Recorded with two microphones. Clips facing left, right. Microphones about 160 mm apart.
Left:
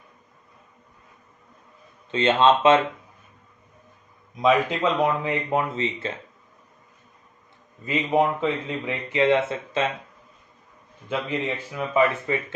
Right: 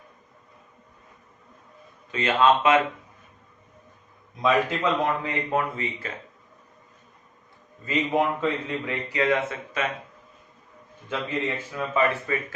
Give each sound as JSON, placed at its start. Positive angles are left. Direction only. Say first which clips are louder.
{"t": 2.1, "sound": "speech", "louder": "left 2 dB", "side_deg": 25}
{"t": 4.4, "sound": "speech", "louder": "left 2 dB", "side_deg": 15}
{"t": 7.9, "sound": "speech", "louder": "left 2 dB", "side_deg": 20}
{"t": 11.1, "sound": "speech", "louder": "left 1 dB", "side_deg": 15}